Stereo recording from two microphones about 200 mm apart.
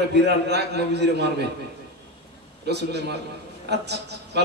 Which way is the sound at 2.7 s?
55° right (ahead or behind).